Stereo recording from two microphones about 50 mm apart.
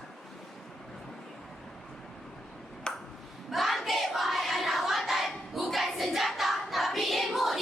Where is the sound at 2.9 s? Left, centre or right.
Centre.